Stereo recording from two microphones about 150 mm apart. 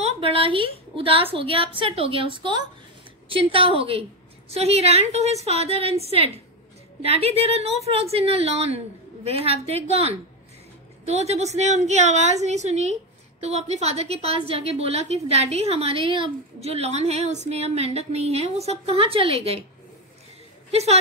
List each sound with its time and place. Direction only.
0.0 s a woman's voice: 35° right (ahead or behind)
20.7 s a woman's voice: 45° right (ahead or behind)